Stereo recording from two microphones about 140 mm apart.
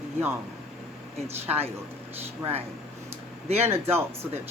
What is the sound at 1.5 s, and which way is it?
Speech, 45° right (ahead or behind).